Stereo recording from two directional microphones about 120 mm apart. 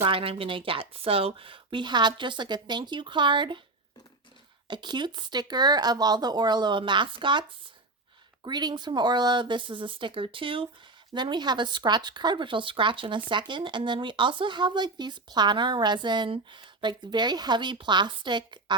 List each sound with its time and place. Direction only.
0.0 s speech: 50° right (ahead or behind)
4.7 s speech: 40° right (ahead or behind)
8.4 s speech: 35° right (ahead or behind)